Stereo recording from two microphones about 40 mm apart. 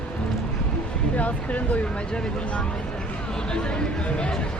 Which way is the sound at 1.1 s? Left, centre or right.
Left.